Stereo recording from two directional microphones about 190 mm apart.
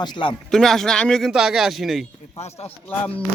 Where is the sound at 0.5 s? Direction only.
Centre (ahead or behind).